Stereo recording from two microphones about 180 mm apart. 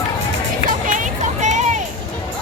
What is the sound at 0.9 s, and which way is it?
Music, 45° right (ahead or behind).